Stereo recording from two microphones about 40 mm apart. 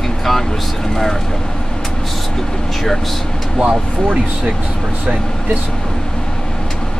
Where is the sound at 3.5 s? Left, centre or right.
Right.